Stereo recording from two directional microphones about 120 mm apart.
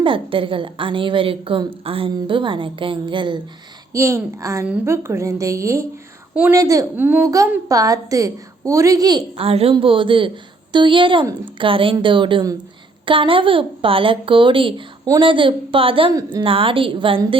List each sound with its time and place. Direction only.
0.0 s a woman's voice: 45° right (ahead or behind)
3.9 s a woman's voice: 25° right (ahead or behind)
6.9 s speech: 15° right (ahead or behind)
7.7 s a woman's voice: 30° right (ahead or behind)
9.4 s a woman's voice: 55° right (ahead or behind)